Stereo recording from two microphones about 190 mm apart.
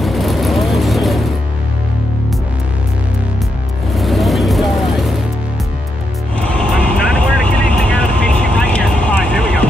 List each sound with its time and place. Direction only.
0.0 s vehicle: centre (ahead or behind)
3.9 s vehicle: centre (ahead or behind)
6.5 s vehicle: 5° left (ahead or behind)